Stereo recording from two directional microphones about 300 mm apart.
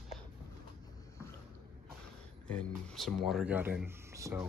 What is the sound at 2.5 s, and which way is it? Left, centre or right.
Speech, centre.